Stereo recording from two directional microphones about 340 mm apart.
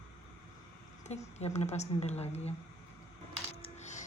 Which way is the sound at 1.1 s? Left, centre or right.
Centre.